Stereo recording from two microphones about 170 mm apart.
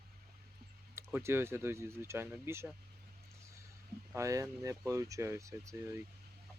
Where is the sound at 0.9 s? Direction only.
15° right (ahead or behind).